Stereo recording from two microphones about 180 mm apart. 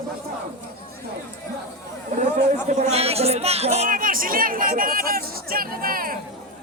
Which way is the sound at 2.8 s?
35° right (ahead or behind).